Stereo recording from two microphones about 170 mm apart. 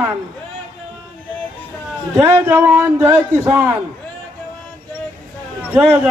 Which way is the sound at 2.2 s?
15° right (ahead or behind).